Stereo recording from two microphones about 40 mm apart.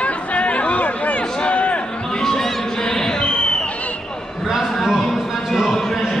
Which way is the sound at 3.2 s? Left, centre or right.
Left.